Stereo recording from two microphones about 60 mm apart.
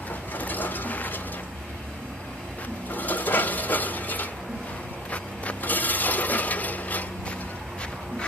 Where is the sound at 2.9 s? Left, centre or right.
Left.